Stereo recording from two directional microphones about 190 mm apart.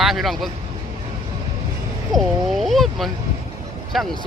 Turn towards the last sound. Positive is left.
turn(degrees=0)  # may be behind; listen again after turning